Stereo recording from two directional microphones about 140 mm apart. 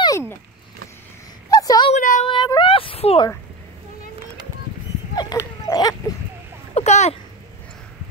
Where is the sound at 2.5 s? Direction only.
40° left (ahead or behind).